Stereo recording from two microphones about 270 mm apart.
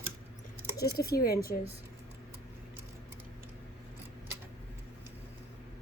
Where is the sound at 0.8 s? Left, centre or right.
Left.